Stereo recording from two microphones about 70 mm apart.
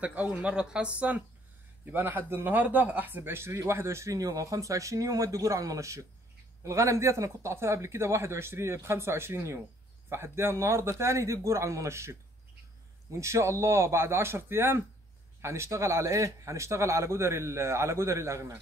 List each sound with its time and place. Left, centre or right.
0.0 s speech: right
13.2 s speech: right